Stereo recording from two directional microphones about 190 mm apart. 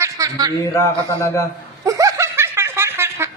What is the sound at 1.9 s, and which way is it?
Snicker, 15° right (ahead or behind).